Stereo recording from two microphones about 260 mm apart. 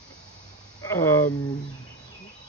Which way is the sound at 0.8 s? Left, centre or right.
Centre.